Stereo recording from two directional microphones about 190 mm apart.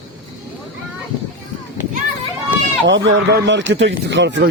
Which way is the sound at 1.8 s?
40° left (ahead or behind).